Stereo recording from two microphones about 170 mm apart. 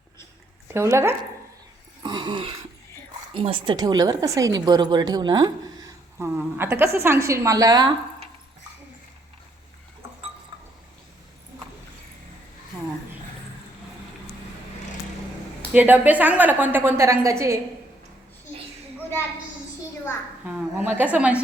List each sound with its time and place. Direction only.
0.7 s a woman's voice: 15° right (ahead or behind)
2.0 s a sound: 25° right (ahead or behind)
3.3 s a woman's voice: 30° right (ahead or behind)
15.7 s a woman's voice: 10° right (ahead or behind)
20.7 s a woman's voice: 10° right (ahead or behind)